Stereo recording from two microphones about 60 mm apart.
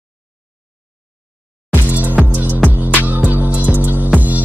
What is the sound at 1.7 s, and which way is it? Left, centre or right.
Music, right.